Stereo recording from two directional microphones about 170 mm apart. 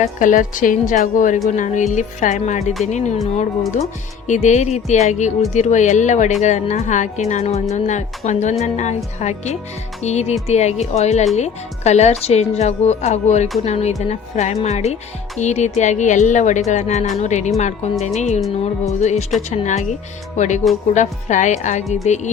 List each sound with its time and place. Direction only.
0.0 s speech: 50° left (ahead or behind)
4.3 s speech: 45° left (ahead or behind)